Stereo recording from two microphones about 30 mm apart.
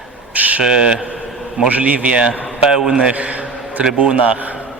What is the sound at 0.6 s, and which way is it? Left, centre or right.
Speech, right.